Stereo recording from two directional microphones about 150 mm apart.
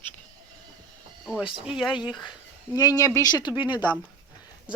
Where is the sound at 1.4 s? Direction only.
35° left (ahead or behind).